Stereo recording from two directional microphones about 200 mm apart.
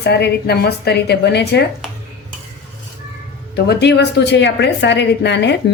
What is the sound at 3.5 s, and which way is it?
A woman's voice, 55° left (ahead or behind).